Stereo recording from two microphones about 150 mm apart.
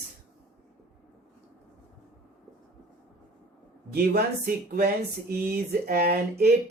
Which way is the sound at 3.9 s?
85° right.